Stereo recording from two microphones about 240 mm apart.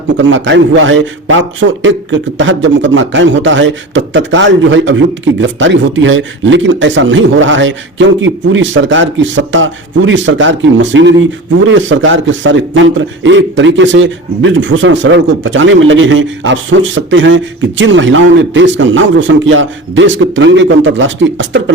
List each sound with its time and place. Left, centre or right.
0.2 s a man's voice: right